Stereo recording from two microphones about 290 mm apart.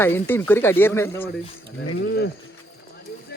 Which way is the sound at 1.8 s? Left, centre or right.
Left.